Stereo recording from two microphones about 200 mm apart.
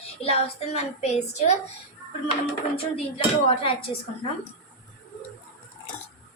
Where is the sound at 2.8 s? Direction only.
30° left (ahead or behind).